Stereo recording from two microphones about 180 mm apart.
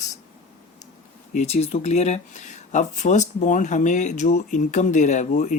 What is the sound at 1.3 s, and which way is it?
Speech, 40° left (ahead or behind).